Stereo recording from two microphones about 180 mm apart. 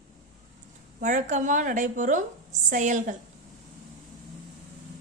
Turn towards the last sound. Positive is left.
turn(degrees=-45)  # may be behind; listen again after turning